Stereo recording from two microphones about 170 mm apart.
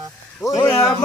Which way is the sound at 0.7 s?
Centre (ahead or behind).